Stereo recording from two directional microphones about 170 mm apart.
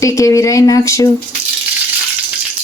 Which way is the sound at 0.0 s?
20° left (ahead or behind).